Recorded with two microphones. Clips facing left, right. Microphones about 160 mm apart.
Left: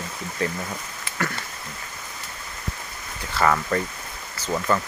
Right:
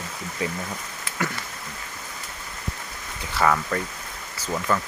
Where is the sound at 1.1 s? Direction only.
5° right (ahead or behind).